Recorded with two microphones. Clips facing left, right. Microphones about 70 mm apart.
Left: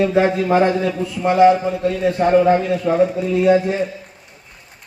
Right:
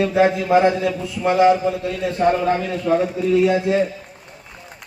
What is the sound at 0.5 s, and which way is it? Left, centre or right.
Speech, centre.